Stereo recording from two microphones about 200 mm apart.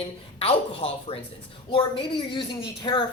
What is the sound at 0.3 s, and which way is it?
Speech, 30° left (ahead or behind).